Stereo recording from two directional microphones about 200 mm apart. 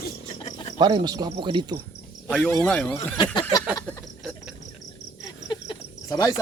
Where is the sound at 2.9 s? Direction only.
25° left (ahead or behind).